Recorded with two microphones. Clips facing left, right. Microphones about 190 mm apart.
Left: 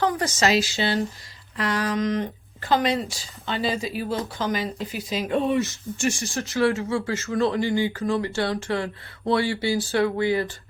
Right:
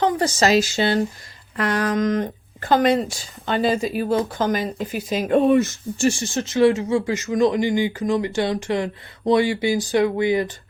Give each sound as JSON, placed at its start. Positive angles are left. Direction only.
{"t": 0.0, "sound": "speech", "side_deg": -25}
{"t": 6.0, "sound": "speech", "side_deg": -30}
{"t": 6.3, "sound": "speech", "side_deg": -20}